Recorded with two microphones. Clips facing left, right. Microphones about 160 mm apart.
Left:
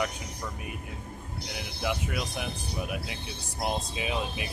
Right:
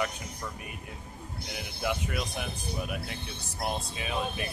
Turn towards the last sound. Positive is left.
turn(degrees=15)  # may be behind; listen again after turning